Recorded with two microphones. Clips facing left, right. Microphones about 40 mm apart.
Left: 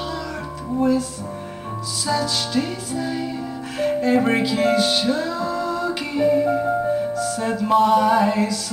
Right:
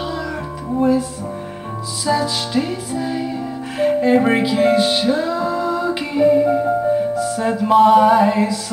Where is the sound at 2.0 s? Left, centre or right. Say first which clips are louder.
Right 4 dB; centre.